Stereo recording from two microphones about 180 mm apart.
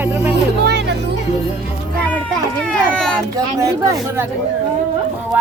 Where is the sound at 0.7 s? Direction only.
70° right (ahead or behind).